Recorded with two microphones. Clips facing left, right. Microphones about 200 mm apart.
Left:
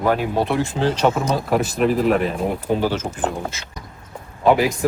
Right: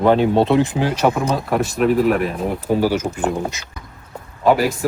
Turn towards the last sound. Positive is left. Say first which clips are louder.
# even
turn(degrees=0)  # may be behind; listen again after turning